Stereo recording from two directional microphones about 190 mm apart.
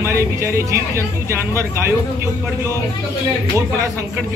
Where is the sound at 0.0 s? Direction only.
15° right (ahead or behind).